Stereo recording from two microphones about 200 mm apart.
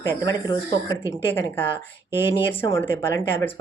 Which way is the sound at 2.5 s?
15° left (ahead or behind).